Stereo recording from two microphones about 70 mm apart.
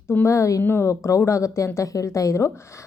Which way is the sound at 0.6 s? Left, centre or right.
Left.